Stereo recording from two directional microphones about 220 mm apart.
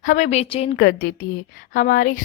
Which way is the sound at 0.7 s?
40° left (ahead or behind).